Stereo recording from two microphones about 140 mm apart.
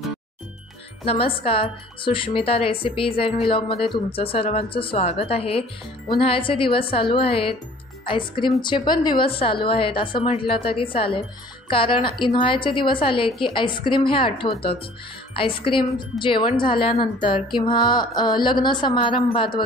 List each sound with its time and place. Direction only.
1.0 s speech: 40° left (ahead or behind)